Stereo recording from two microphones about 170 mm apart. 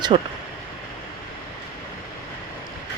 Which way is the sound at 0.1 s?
30° right (ahead or behind).